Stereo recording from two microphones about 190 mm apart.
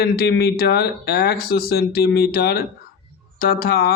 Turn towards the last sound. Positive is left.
turn(degrees=55)  # may be behind; listen again after turning